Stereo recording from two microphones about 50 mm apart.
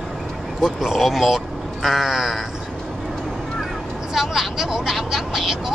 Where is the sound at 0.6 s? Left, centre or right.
Centre.